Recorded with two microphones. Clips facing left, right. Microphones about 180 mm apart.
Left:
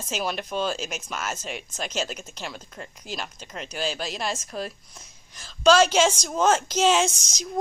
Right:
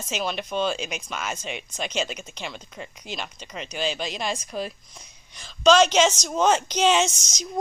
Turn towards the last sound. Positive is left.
turn(degrees=5)  # may be behind; listen again after turning